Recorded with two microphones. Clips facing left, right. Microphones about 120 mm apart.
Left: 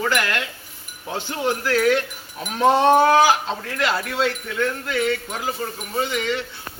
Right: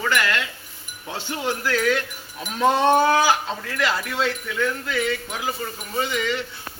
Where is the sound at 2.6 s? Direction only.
30° left (ahead or behind).